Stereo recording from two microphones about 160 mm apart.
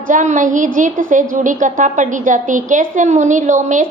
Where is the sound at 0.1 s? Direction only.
55° right (ahead or behind).